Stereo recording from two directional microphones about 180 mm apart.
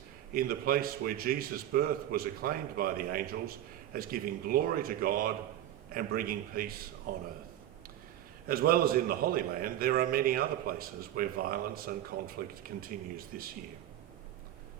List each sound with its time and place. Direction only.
0.3 s a man's voice: 55° right (ahead or behind)
8.4 s a man's voice: 55° right (ahead or behind)